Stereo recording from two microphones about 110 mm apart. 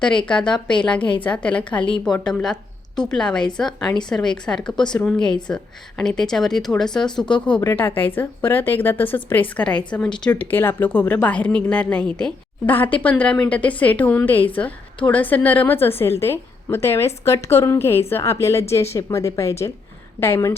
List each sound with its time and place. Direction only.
0.3 s a woman's voice: 10° left (ahead or behind)
1.7 s a woman's voice: 45° left (ahead or behind)
2.2 s a woman's voice: 5° left (ahead or behind)
7.3 s a woman's voice: 45° left (ahead or behind)
7.6 s a woman's voice: 20° left (ahead or behind)